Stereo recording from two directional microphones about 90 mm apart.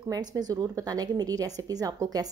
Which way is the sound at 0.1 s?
45° right (ahead or behind).